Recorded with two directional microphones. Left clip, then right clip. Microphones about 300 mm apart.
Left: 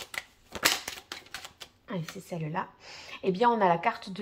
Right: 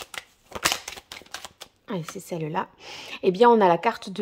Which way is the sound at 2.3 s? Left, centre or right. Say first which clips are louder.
Right 6 dB; right.